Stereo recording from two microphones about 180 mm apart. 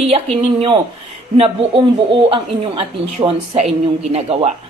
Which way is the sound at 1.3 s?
30° right (ahead or behind).